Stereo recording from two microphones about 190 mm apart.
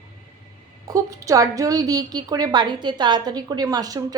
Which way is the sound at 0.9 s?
15° right (ahead or behind).